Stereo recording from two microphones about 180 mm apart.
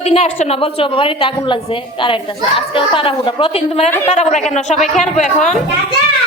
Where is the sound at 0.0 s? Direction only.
35° left (ahead or behind).